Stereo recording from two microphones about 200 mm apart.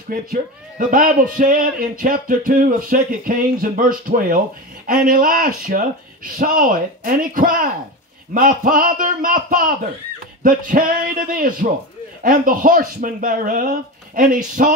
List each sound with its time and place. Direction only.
0.1 s a man's voice: 45° right (ahead or behind)